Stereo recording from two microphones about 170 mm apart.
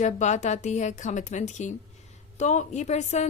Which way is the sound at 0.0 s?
45° left (ahead or behind).